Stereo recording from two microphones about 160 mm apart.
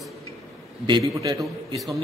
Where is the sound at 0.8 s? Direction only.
30° right (ahead or behind).